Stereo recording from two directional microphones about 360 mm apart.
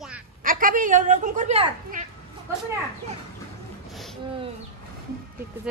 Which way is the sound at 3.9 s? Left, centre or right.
Centre.